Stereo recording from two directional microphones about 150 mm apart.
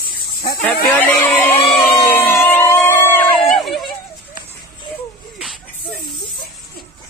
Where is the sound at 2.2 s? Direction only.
15° left (ahead or behind).